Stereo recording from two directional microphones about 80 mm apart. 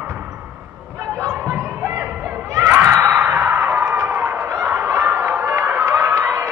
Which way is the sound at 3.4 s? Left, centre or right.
Centre.